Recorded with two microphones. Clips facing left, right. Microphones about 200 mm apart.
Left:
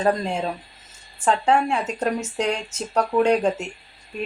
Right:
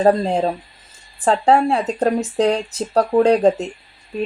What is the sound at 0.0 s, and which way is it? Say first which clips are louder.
A woman's voice: right 7 dB; 35° right (ahead or behind).